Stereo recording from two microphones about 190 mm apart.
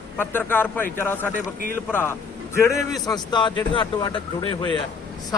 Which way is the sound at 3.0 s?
25° left (ahead or behind).